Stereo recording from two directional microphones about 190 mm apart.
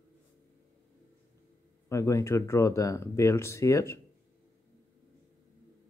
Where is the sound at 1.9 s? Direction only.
15° left (ahead or behind).